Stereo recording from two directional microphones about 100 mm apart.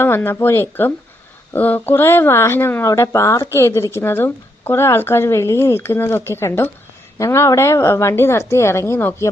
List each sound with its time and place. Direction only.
0.0 s speech: 20° left (ahead or behind)